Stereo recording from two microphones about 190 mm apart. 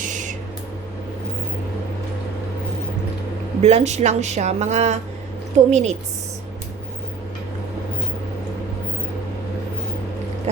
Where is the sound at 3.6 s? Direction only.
35° right (ahead or behind).